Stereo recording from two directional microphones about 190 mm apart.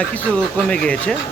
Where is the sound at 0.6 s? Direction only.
5° left (ahead or behind).